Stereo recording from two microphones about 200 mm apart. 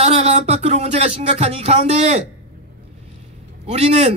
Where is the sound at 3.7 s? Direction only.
30° right (ahead or behind).